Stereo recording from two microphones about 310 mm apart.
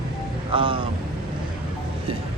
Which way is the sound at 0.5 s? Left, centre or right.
Centre.